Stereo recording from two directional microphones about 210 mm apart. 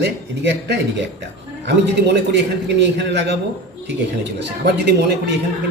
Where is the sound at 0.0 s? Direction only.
55° right (ahead or behind).